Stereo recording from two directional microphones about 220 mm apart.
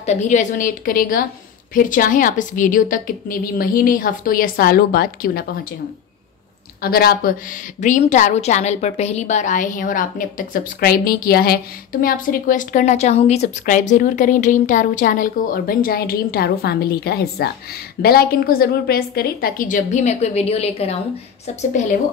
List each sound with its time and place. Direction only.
0.0 s a woman's voice: 30° left (ahead or behind)
6.8 s a woman's voice: 45° left (ahead or behind); by 21.0 s 30° left (ahead or behind)